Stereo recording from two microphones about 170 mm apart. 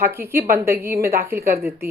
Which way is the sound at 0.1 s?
15° right (ahead or behind).